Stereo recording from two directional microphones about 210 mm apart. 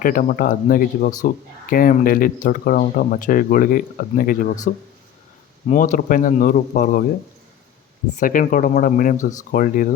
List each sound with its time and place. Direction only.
0.0 s speech: 40° left (ahead or behind)
8.2 s speech: 40° left (ahead or behind)